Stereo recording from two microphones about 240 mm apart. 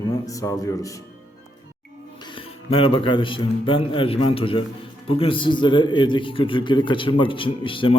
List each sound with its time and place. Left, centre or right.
0.0 s speech: centre
2.2 s a man's voice: left